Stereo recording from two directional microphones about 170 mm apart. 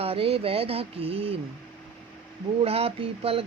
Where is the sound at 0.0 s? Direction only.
35° right (ahead or behind).